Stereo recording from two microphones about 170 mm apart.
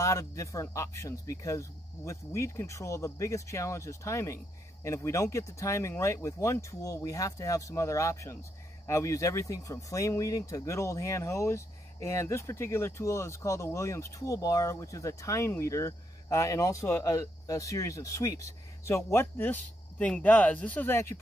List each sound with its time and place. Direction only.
0.0 s speech: 20° left (ahead or behind)